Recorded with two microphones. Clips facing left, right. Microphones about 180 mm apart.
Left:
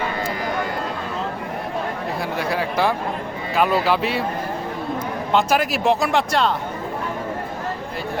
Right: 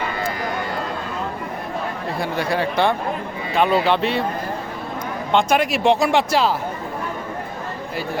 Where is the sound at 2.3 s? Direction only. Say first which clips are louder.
Right 2 dB; centre (ahead or behind).